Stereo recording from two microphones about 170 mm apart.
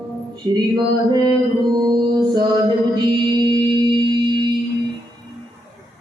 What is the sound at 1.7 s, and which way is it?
Music, 25° right (ahead or behind).